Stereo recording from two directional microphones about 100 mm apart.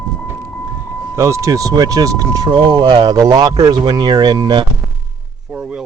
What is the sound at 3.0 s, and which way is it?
Speech, 40° right (ahead or behind).